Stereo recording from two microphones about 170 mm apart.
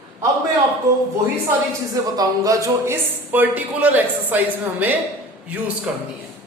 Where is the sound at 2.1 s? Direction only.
20° right (ahead or behind).